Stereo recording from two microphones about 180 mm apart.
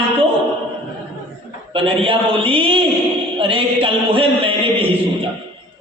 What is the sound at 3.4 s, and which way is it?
Mantra, 30° right (ahead or behind).